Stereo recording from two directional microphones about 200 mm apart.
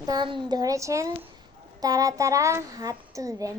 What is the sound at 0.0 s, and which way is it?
A child's voice, 20° right (ahead or behind).